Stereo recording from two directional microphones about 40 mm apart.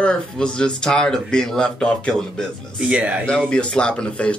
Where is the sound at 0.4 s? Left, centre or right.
Left.